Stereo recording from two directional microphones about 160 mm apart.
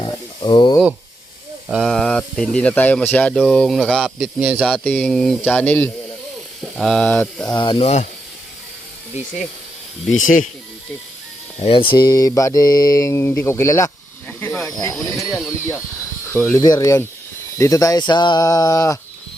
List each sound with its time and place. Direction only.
0.1 s a sound: 30° left (ahead or behind)
1.6 s speech: 5° right (ahead or behind)
1.9 s speech: 5° left (ahead or behind)
4.4 s speech: 10° right (ahead or behind)
4.7 s speech: 10° left (ahead or behind)
7.4 s speech: 30° left (ahead or behind)
10.2 s speech: 55° left (ahead or behind)
11.6 s mantra: 35° left (ahead or behind); by 14.6 s 15° left (ahead or behind)
14.7 s speech: 20° left (ahead or behind)
15.0 s a sound: 20° left (ahead or behind)
16.2 s speech: 10° left (ahead or behind)